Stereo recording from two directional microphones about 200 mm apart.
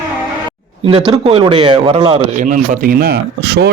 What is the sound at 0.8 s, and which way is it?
A man's voice, 25° right (ahead or behind).